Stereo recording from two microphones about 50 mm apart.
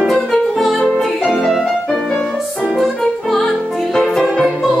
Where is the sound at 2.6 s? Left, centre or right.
Centre.